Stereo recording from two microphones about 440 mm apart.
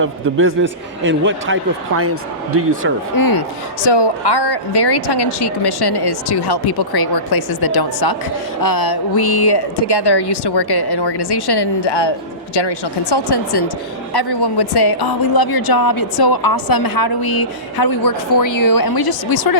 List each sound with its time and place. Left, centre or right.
0.0 s a man's voice: right
3.2 s speech: left
3.8 s speech: left